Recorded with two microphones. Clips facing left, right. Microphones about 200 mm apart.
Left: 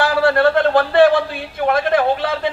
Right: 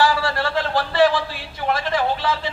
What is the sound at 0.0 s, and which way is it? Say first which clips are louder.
A man's voice: left 6 dB; 55° left (ahead or behind).